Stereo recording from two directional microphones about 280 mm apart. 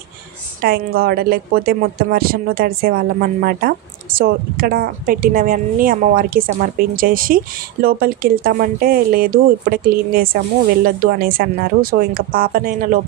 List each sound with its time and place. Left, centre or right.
0.6 s a woman's voice: right